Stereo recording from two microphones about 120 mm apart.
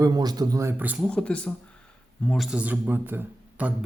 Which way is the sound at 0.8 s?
15° right (ahead or behind).